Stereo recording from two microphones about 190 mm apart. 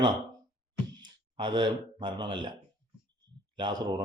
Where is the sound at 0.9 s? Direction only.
25° right (ahead or behind).